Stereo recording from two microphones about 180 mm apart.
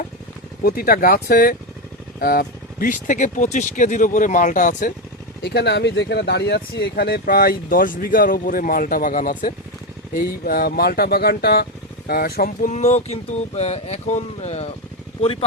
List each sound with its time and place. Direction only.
0.6 s speech: 55° left (ahead or behind)
5.4 s speech: 65° left (ahead or behind)
12.7 s speech: 40° left (ahead or behind)